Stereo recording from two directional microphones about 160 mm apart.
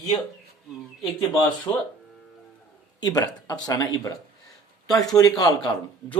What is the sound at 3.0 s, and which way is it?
Speech, 25° left (ahead or behind).